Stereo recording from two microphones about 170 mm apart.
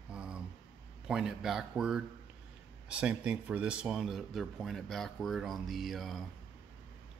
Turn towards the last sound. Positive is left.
turn(degrees=0)  # may be behind; listen again after turning